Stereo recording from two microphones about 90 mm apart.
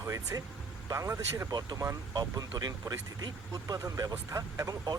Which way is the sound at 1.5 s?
50° right (ahead or behind).